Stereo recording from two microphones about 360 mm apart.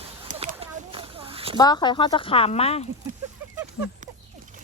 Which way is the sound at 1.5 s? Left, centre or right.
Centre.